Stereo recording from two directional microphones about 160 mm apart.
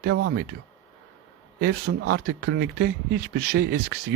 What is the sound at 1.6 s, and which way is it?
Speech, 90° right.